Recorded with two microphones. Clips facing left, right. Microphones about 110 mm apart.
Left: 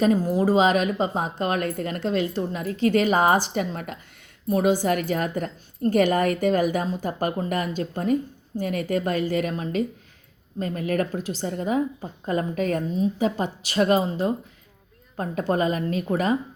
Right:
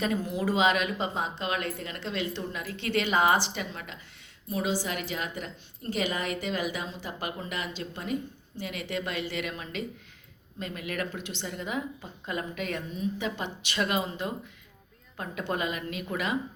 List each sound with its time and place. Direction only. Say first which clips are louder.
0.0 s a woman's voice: left 9 dB; 40° left (ahead or behind)